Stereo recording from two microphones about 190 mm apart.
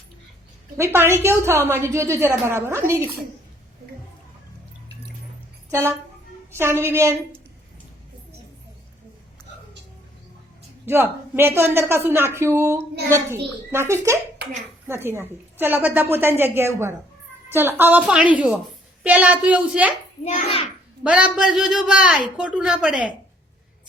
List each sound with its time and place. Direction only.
0.9 s a woman's voice: 15° right (ahead or behind)
5.7 s a woman's voice: 15° right (ahead or behind)
10.8 s a woman's voice: 10° right (ahead or behind)
20.2 s a child's voice: 35° left (ahead or behind)
21.1 s a man's voice: 5° right (ahead or behind)